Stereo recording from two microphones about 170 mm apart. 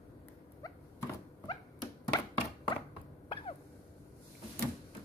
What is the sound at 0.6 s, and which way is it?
Thunk, 20° left (ahead or behind).